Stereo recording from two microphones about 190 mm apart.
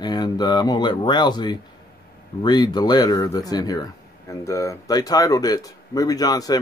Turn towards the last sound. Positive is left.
turn(degrees=20)  # may be behind; listen again after turning